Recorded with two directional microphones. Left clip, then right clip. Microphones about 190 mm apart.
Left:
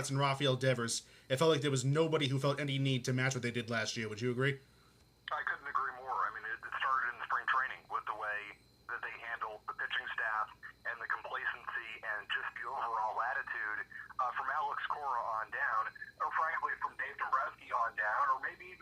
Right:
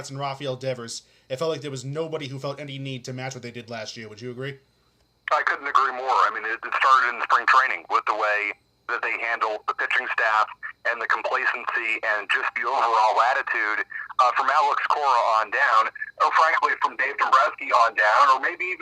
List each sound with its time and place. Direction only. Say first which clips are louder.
0.1 s speech: right 3 dB; 15° left (ahead or behind)
5.2 s speech: right 15 dB; 45° right (ahead or behind)